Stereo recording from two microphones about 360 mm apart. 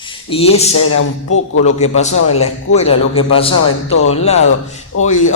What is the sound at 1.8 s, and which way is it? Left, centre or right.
A man's voice, centre.